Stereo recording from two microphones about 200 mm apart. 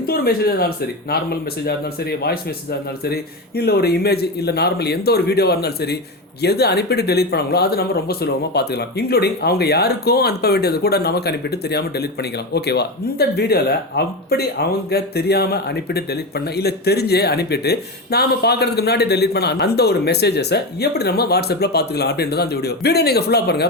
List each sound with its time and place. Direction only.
0.1 s speech: 50° left (ahead or behind)